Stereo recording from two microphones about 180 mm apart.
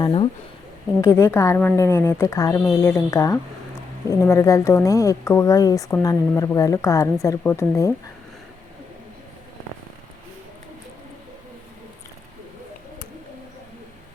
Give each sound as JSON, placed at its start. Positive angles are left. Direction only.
{"t": 0.0, "sound": "speech", "side_deg": 30}
{"t": 1.0, "sound": "speech", "side_deg": 15}